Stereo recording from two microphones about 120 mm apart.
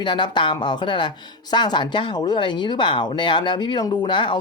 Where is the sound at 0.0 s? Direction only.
40° left (ahead or behind).